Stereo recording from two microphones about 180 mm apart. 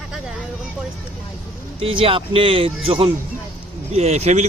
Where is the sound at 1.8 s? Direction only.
30° right (ahead or behind).